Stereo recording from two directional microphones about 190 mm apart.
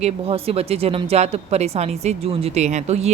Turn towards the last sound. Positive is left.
turn(degrees=-35)  # may be behind; listen again after turning